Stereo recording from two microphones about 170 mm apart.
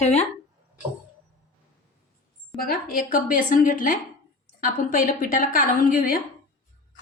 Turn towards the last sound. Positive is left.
turn(degrees=55)  # may be behind; listen again after turning